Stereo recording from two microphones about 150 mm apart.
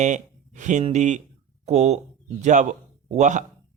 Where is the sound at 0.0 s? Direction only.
55° right (ahead or behind).